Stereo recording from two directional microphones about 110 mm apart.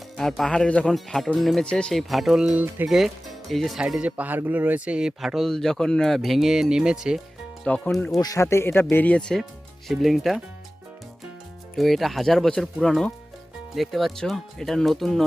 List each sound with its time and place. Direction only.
0.2 s speech: 5° left (ahead or behind); by 2.8 s 15° right (ahead or behind)
2.8 s speech: 5° right (ahead or behind)
7.6 s speech: 10° left (ahead or behind)
8.2 s speech: 30° left (ahead or behind); by 10.4 s centre (ahead or behind)
11.8 s speech: centre (ahead or behind)